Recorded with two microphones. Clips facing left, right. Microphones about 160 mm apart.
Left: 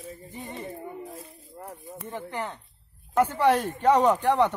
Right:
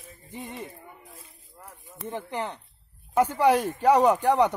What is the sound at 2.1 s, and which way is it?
Speech, 20° right (ahead or behind).